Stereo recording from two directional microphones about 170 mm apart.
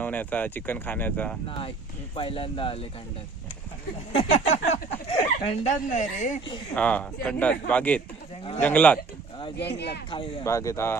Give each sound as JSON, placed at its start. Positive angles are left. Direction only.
{"t": 0.0, "sound": "speech", "side_deg": 10}
{"t": 1.5, "sound": "speech", "side_deg": 30}
{"t": 4.1, "sound": "speech", "side_deg": 40}
{"t": 6.7, "sound": "speech", "side_deg": 5}
{"t": 9.6, "sound": "speech", "side_deg": 80}
{"t": 10.1, "sound": "speech", "side_deg": 30}
{"t": 10.4, "sound": "speech", "side_deg": 15}